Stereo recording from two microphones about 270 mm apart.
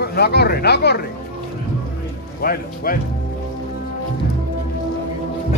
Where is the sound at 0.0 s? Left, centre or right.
Left.